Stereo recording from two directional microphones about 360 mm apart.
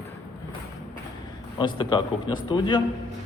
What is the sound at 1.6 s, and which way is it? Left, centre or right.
Speech, centre.